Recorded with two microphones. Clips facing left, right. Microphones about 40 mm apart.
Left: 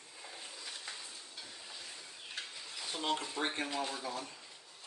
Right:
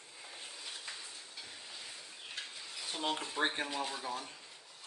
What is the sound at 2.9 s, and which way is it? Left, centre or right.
Speech, centre.